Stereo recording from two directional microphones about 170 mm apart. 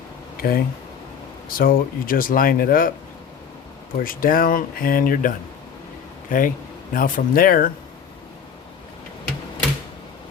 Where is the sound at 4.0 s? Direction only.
55° left (ahead or behind).